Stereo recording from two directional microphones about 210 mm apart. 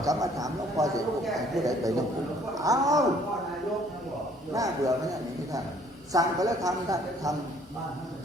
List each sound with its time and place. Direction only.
0.0 s a man's voice: 15° right (ahead or behind)
1.2 s a man's voice: centre (ahead or behind)
2.6 s a man's voice: 15° right (ahead or behind)
4.5 s a man's voice: 15° right (ahead or behind)
6.1 s a man's voice: 15° right (ahead or behind)